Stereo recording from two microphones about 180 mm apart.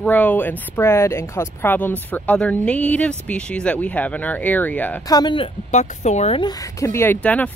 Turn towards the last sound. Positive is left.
turn(degrees=10)  # may be behind; listen again after turning